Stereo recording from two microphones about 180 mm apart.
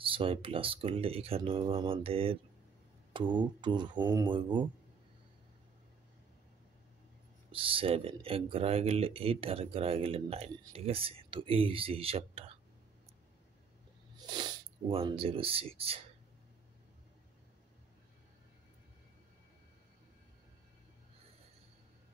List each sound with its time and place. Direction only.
0.0 s speech: 30° right (ahead or behind)
7.5 s speech: 30° right (ahead or behind)
14.1 s speech: 25° right (ahead or behind)